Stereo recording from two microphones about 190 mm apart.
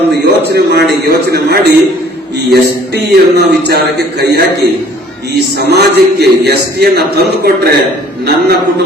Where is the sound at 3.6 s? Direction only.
60° right (ahead or behind).